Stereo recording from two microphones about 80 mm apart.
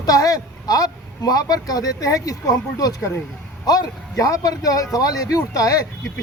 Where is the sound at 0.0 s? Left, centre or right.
Left.